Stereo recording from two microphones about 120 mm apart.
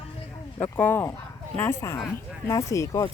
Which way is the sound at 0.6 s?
15° left (ahead or behind).